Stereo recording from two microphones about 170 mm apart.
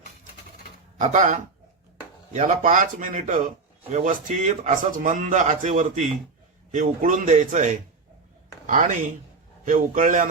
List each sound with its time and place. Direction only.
0.9 s a man's voice: 45° right (ahead or behind)